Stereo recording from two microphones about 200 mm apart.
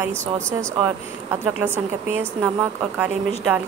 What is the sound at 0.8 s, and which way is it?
Speech, 10° right (ahead or behind).